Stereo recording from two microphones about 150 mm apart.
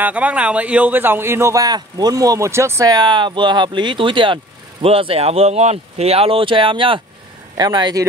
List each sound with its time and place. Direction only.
0.0 s speech: 10° right (ahead or behind); by 8.0 s 30° right (ahead or behind)